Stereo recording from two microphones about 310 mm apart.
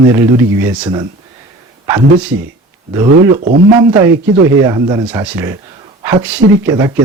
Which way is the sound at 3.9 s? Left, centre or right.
Centre.